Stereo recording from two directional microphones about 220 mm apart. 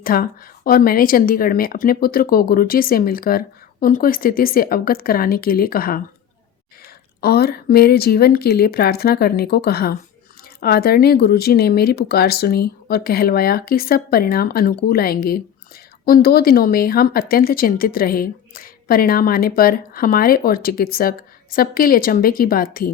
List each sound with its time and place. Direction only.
0.0 s speech: 40° left (ahead or behind)